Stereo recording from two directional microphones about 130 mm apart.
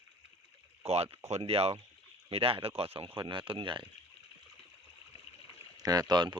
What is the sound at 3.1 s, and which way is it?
Speech, 35° right (ahead or behind).